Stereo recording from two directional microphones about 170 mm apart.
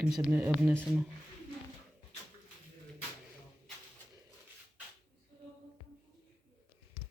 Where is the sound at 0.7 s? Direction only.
5° left (ahead or behind).